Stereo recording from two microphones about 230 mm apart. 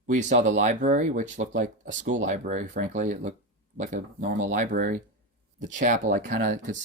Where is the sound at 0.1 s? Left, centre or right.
Right.